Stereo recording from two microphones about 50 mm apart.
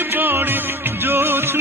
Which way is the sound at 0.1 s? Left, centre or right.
Right.